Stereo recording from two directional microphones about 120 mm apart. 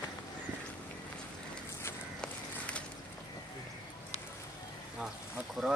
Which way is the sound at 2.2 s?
10° left (ahead or behind).